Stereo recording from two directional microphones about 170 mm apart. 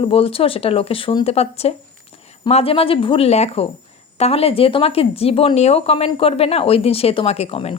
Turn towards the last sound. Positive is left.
turn(degrees=35)  # may be behind; listen again after turning